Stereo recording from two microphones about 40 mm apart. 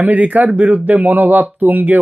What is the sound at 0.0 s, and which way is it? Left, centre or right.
Speech, right.